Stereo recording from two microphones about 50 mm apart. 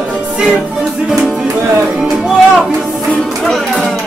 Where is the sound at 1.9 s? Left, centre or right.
Centre.